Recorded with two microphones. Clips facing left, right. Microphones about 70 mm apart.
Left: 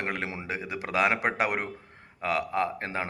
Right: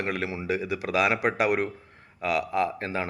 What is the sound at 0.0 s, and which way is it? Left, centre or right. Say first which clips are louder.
Speech: right 3 dB; left.